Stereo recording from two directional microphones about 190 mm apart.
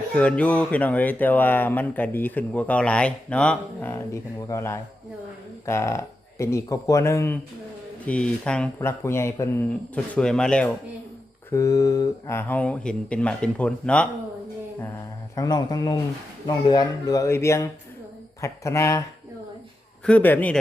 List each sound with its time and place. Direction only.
0.1 s speech: 5° left (ahead or behind)
11.5 s speech: 15° left (ahead or behind)
15.4 s speech: 20° left (ahead or behind)
20.1 s speech: 10° left (ahead or behind)